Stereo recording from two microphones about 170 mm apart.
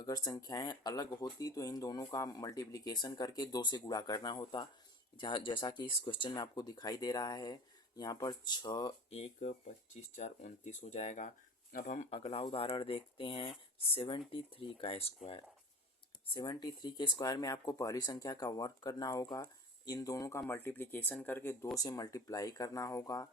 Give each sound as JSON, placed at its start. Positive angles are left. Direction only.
{"t": 0.0, "sound": "speech", "side_deg": 25}
{"t": 9.0, "sound": "speech", "side_deg": 35}